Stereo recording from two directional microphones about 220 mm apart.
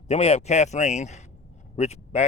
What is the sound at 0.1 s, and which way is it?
Speech, 30° left (ahead or behind).